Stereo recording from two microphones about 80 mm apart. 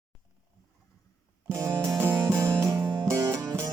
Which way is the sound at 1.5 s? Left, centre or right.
Right.